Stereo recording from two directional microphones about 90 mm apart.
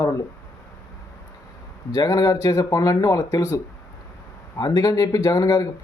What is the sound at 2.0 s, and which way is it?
Speech, 45° left (ahead or behind).